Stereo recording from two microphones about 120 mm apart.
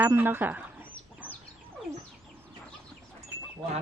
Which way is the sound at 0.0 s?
15° right (ahead or behind).